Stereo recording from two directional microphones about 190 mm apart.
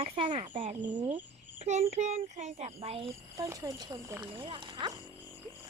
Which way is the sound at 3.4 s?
20° right (ahead or behind).